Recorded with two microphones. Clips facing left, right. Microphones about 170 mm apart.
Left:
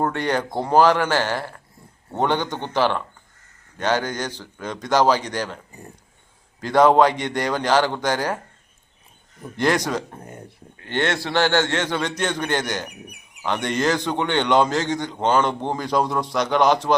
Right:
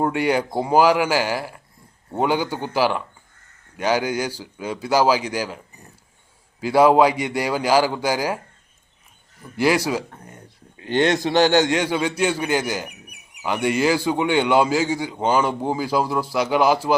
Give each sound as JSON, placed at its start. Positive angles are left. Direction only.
{"t": 0.0, "sound": "a man's voice", "side_deg": -10}
{"t": 6.6, "sound": "a man's voice", "side_deg": -10}
{"t": 9.6, "sound": "a man's voice", "side_deg": -5}
{"t": 10.1, "sound": "speech", "side_deg": 25}
{"t": 10.8, "sound": "a man's voice", "side_deg": -15}